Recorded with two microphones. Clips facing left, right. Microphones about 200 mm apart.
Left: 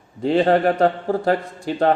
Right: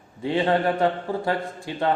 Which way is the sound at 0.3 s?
45° left (ahead or behind).